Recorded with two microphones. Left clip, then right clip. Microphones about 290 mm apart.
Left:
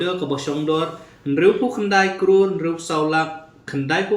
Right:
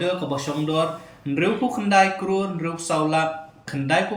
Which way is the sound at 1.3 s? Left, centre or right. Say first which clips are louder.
Left 5 dB; centre.